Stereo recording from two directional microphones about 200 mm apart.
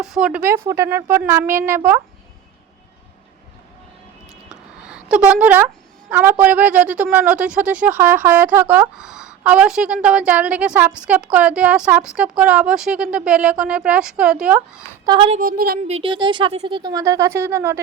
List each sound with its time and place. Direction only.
0.0 s a woman's voice: 5° right (ahead or behind)
4.9 s a woman's voice: 5° right (ahead or behind)
15.0 s speech: 25° right (ahead or behind)
15.4 s a woman's voice: 45° right (ahead or behind)
15.9 s speech: 25° right (ahead or behind)